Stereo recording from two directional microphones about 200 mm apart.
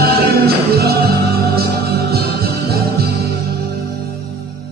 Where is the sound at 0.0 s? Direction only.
50° right (ahead or behind).